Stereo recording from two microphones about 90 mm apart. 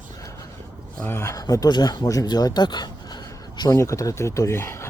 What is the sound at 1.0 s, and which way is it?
Speech, 30° left (ahead or behind).